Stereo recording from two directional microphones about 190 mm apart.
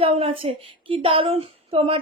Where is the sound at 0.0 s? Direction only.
30° right (ahead or behind).